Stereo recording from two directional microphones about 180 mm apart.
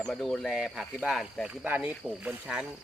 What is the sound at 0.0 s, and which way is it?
Speech, centre (ahead or behind).